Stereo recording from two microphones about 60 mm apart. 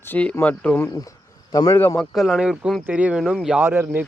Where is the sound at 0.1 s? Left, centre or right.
Left.